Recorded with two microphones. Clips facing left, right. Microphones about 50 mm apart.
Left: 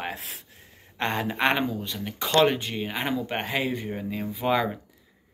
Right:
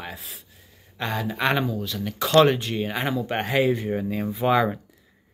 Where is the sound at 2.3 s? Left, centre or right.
Centre.